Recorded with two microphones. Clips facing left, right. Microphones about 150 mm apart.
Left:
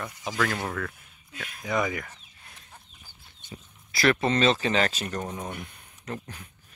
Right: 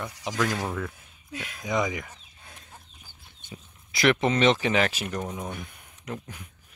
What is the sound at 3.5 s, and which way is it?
Speech, 15° right (ahead or behind).